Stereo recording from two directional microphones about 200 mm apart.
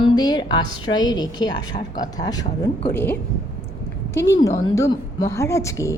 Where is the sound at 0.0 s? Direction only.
20° left (ahead or behind).